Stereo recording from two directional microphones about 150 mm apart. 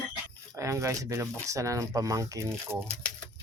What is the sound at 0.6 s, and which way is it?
Speech, 20° right (ahead or behind).